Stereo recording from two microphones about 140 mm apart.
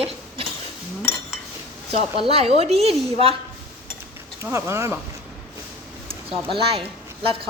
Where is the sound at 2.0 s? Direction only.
45° right (ahead or behind).